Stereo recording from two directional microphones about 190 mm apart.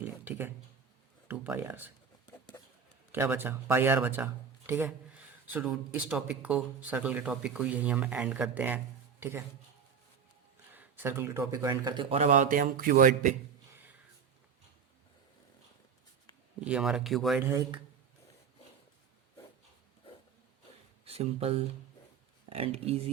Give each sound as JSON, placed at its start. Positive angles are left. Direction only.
{"t": 0.0, "sound": "a sound", "side_deg": -10}
{"t": 1.3, "sound": "speech", "side_deg": -10}
{"t": 3.1, "sound": "speech", "side_deg": -10}
{"t": 10.8, "sound": "speech", "side_deg": -10}
{"t": 16.6, "sound": "speech", "side_deg": -5}
{"t": 17.4, "sound": "speech", "side_deg": -15}
{"t": 21.0, "sound": "speech", "side_deg": -30}